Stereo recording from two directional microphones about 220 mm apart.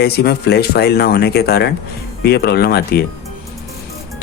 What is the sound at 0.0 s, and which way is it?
Speech, 45° left (ahead or behind).